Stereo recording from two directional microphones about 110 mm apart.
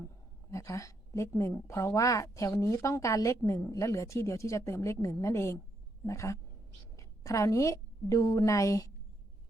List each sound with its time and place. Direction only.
0.5 s a woman's voice: 30° left (ahead or behind)